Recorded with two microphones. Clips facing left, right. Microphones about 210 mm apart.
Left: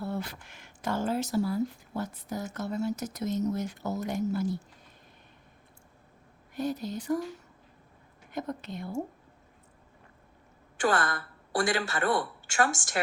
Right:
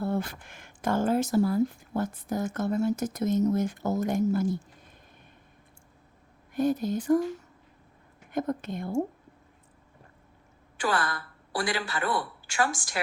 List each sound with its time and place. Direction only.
0.0 s speech: 50° right (ahead or behind)
6.5 s speech: 50° right (ahead or behind)
8.3 s speech: 50° right (ahead or behind)
10.8 s a woman's voice: 45° left (ahead or behind)